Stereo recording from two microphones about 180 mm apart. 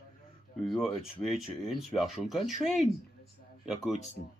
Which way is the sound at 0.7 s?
Centre (ahead or behind).